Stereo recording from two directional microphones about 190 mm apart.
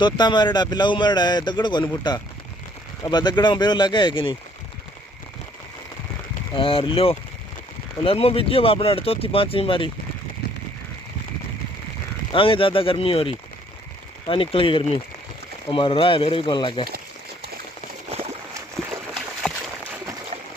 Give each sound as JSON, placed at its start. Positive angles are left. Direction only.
{"t": 0.0, "sound": "speech", "side_deg": 25}
{"t": 6.5, "sound": "speech", "side_deg": 30}
{"t": 12.3, "sound": "speech", "side_deg": 30}
{"t": 18.1, "sound": "a sound", "side_deg": -30}